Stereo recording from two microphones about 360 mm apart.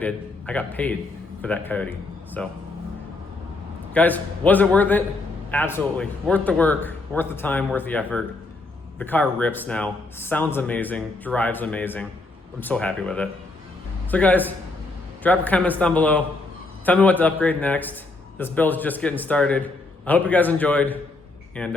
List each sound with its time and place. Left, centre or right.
0.0 s a man's voice: centre
3.9 s speech: centre